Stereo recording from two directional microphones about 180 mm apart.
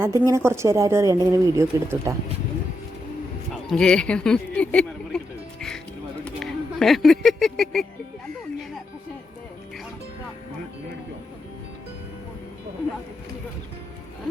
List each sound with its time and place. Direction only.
0.0 s speech: 15° right (ahead or behind)
3.5 s a sound: 5° left (ahead or behind)
6.2 s speech: 5° left (ahead or behind)